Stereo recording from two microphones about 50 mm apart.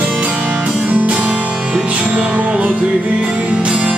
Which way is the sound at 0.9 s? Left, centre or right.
Right.